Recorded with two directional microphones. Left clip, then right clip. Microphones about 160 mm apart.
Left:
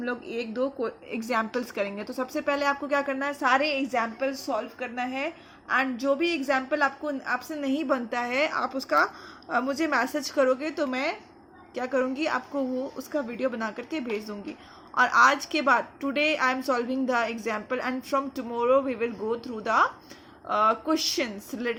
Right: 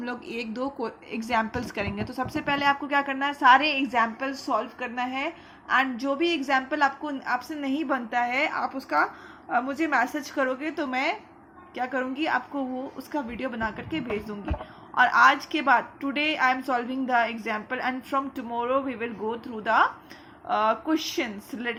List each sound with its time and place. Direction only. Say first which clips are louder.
0.0 s speech: left 2 dB; 5° left (ahead or behind)
1.1 s a woman's voice: right 2 dB; 15° left (ahead or behind); by 13.1 s 35° left (ahead or behind)
13.1 s a woman's voice: left 2 dB; 20° left (ahead or behind)
13.6 s a woman's voice: right 2 dB; 30° left (ahead or behind)